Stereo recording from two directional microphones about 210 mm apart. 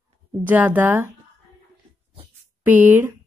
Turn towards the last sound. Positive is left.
turn(degrees=-10)  # may be behind; listen again after turning